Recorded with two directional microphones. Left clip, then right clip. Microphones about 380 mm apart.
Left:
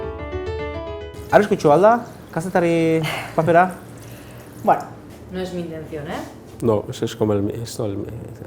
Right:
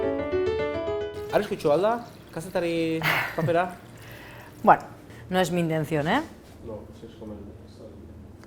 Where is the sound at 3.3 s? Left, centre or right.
Left.